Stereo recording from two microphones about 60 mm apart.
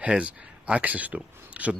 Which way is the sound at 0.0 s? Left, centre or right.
Centre.